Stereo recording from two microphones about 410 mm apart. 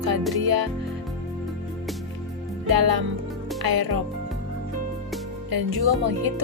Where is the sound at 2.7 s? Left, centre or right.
Right.